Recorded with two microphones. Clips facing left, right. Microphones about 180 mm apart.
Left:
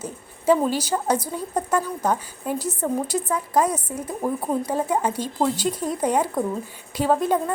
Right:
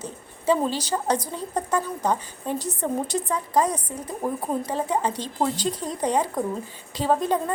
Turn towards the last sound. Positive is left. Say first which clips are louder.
# left 2 dB
turn(degrees=10)  # may be behind; listen again after turning